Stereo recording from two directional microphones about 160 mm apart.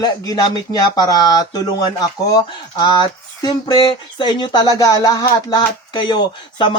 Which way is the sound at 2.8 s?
25° left (ahead or behind).